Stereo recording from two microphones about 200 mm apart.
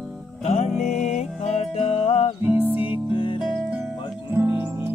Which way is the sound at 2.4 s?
10° right (ahead or behind).